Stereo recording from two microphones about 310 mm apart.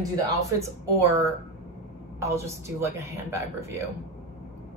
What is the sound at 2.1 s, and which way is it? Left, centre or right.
A woman's voice, centre.